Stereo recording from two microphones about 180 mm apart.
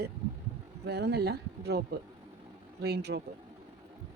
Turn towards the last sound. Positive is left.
turn(degrees=-65)  # may be behind; listen again after turning